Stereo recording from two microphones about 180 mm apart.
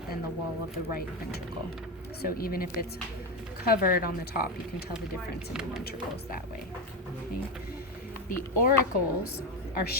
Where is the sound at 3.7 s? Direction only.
55° left (ahead or behind).